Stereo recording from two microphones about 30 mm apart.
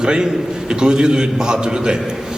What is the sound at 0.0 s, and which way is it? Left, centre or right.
A man's voice, right.